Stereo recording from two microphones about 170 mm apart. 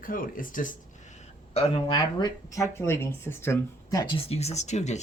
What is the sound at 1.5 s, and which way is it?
Speech, 35° left (ahead or behind).